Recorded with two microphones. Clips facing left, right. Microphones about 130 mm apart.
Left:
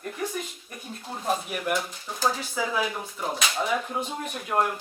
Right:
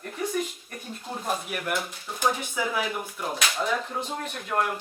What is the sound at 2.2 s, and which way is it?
Speech, 20° right (ahead or behind).